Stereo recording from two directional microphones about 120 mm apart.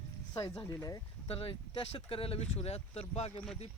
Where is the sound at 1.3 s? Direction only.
55° left (ahead or behind).